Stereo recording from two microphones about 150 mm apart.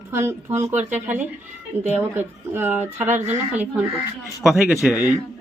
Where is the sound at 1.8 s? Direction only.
15° right (ahead or behind).